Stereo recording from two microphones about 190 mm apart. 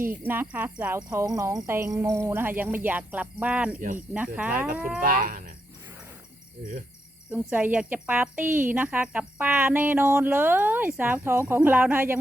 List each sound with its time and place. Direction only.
0.3 s speech: 10° right (ahead or behind)
4.9 s speech: 50° right (ahead or behind)
7.3 s speech: 10° right (ahead or behind)